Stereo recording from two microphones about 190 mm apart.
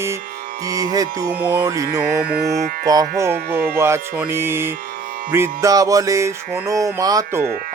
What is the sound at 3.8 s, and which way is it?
Music, 15° right (ahead or behind).